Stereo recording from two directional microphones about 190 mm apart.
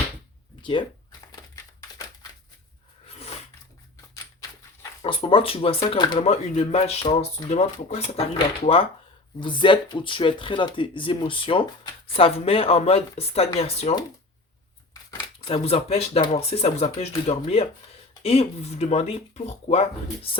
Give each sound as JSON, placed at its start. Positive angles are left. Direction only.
{"t": 0.6, "sound": "speech", "side_deg": 25}
{"t": 3.1, "sound": "a sound", "side_deg": 30}
{"t": 5.0, "sound": "speech", "side_deg": 30}
{"t": 15.4, "sound": "speech", "side_deg": 30}